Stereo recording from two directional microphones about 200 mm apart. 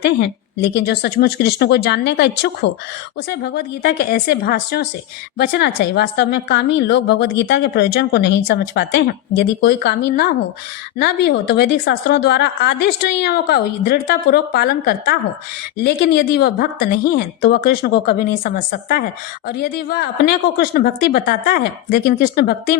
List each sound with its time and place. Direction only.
0.6 s a woman's voice: 55° left (ahead or behind)